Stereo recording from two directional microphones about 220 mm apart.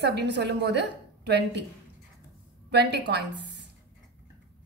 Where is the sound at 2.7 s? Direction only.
50° right (ahead or behind).